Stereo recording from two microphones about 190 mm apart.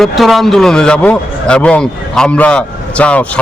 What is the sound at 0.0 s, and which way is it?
A man's voice, centre (ahead or behind).